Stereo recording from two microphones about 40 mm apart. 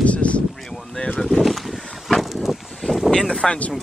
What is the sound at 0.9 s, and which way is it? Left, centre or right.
Boat, left.